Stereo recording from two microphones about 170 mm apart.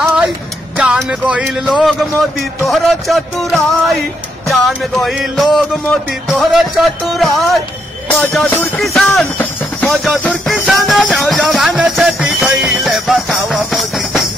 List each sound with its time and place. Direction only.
0.0 s music: 5° right (ahead or behind)